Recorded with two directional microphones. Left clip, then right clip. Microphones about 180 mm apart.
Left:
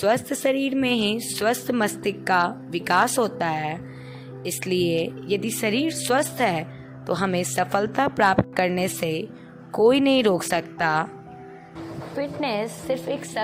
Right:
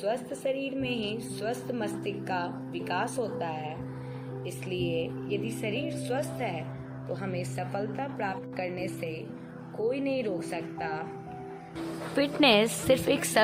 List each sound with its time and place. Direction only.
0.0 s a woman's voice: 65° left (ahead or behind)
12.4 s a woman's voice: 45° right (ahead or behind)